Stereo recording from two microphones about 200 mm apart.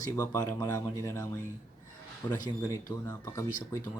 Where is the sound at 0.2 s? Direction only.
15° left (ahead or behind).